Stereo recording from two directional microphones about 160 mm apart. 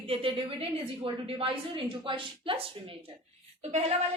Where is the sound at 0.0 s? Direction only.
35° right (ahead or behind).